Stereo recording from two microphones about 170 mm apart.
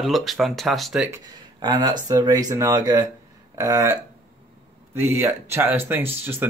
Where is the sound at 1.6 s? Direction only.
25° right (ahead or behind).